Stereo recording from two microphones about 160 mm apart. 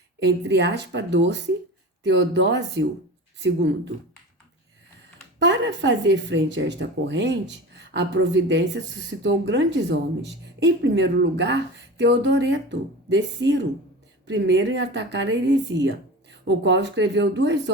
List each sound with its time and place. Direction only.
0.2 s speech: 90° right
5.4 s speech: 90° right